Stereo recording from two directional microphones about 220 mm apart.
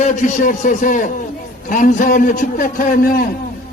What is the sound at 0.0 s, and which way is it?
A man's voice, 35° left (ahead or behind).